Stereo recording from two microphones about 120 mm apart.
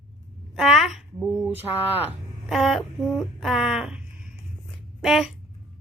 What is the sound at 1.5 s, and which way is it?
Speech, 15° right (ahead or behind).